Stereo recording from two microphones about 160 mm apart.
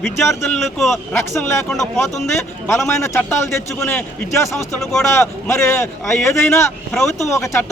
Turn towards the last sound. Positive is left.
turn(degrees=20)  # may be behind; listen again after turning